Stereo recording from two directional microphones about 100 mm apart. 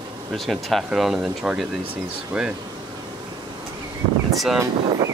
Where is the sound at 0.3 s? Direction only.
Centre (ahead or behind).